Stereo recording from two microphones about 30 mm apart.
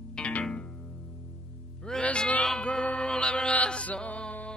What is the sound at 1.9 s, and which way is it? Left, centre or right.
Music, left.